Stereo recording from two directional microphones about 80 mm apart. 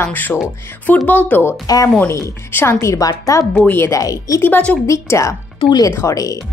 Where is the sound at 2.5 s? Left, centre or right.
Left.